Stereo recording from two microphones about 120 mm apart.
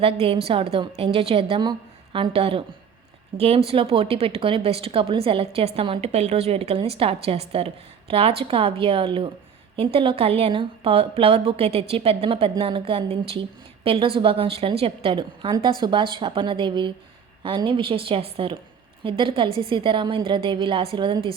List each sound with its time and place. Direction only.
0.0 s a woman's voice: 55° right (ahead or behind)